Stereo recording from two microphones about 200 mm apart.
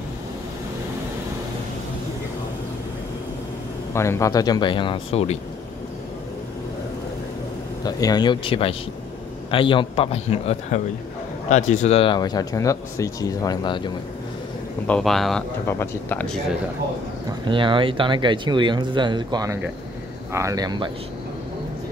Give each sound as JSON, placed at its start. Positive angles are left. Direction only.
{"t": 3.9, "sound": "speech", "side_deg": 15}
{"t": 7.8, "sound": "a man's voice", "side_deg": 20}
{"t": 14.9, "sound": "speech", "side_deg": 0}
{"t": 15.6, "sound": "speech", "side_deg": 10}
{"t": 17.3, "sound": "speech", "side_deg": -25}